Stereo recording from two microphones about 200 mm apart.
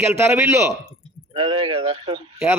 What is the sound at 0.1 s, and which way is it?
Speech, 15° right (ahead or behind).